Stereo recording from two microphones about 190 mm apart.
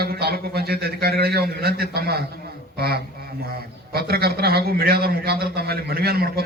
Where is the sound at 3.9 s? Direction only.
55° right (ahead or behind).